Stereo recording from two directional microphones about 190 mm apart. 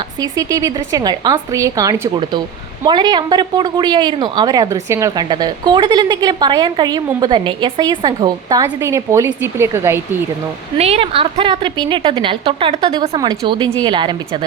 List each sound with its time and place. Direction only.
0.2 s speech: 20° right (ahead or behind)
10.8 s speech: 30° right (ahead or behind)